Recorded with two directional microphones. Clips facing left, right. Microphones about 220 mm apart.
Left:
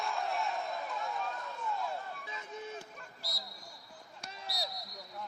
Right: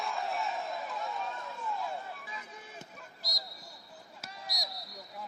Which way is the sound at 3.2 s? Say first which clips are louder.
Right 1 dB; 15° right (ahead or behind).